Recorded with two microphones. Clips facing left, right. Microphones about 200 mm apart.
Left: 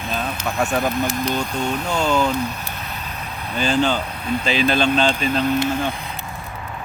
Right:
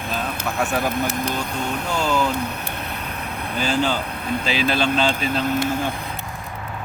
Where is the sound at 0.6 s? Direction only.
5° right (ahead or behind).